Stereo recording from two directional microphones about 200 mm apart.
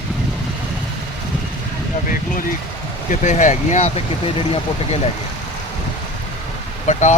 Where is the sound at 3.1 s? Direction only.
40° left (ahead or behind).